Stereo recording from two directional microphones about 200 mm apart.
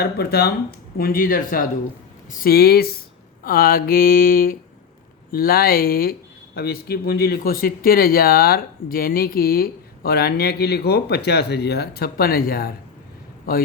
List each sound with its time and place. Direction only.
0.0 s speech: 50° left (ahead or behind)